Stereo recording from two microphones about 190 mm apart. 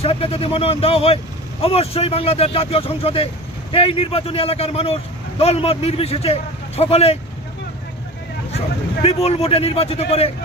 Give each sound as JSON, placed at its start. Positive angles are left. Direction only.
{"t": 0.0, "sound": "speech", "side_deg": 30}
{"t": 8.5, "sound": "speech", "side_deg": 30}